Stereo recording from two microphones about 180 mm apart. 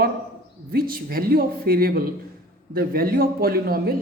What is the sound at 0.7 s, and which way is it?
A man's voice, 55° right (ahead or behind).